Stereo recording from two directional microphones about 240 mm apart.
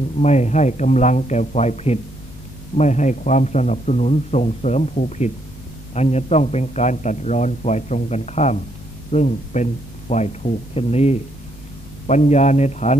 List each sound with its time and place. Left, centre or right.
0.2 s a man's voice: left